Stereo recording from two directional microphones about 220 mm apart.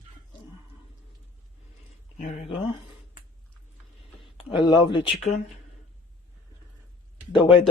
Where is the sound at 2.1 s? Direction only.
35° left (ahead or behind).